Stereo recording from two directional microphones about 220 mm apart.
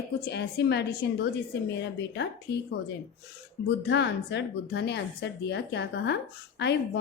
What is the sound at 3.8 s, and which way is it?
A woman's voice, 50° left (ahead or behind).